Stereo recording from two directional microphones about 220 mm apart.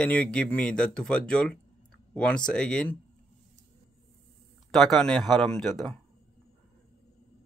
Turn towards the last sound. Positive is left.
turn(degrees=0)  # may be behind; listen again after turning